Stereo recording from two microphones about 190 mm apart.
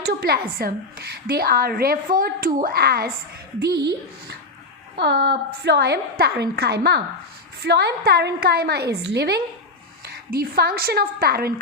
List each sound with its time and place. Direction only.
0.0 s a woman's voice: 55° right (ahead or behind)